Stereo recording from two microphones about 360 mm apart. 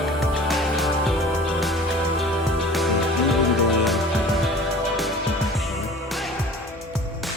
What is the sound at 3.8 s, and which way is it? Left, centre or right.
Music, centre.